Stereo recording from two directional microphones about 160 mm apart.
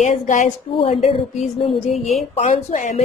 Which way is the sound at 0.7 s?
40° left (ahead or behind).